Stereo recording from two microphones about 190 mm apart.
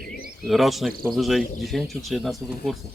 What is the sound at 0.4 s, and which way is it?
Speech, centre (ahead or behind).